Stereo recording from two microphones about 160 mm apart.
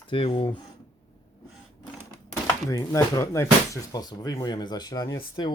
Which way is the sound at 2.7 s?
20° left (ahead or behind).